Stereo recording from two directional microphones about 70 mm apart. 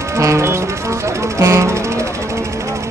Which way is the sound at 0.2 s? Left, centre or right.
Right.